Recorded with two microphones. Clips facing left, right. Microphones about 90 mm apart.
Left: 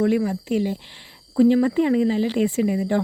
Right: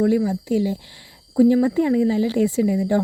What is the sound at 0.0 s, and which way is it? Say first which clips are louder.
Speech: right 2 dB; 15° right (ahead or behind).